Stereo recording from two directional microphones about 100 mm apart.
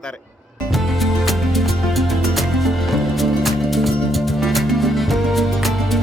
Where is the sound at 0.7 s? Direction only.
Centre (ahead or behind).